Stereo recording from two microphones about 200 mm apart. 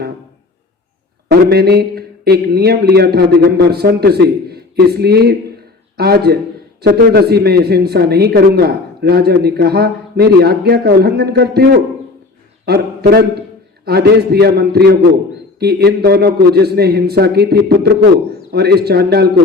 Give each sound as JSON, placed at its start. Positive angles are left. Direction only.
{"t": 1.3, "sound": "a man's voice", "side_deg": -50}